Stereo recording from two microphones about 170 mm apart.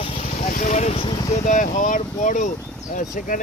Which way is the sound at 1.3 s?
45° left (ahead or behind).